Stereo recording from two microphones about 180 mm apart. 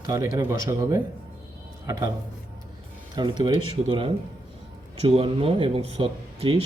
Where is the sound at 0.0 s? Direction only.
20° right (ahead or behind).